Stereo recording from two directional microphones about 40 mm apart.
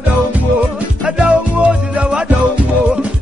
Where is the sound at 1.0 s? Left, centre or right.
Right.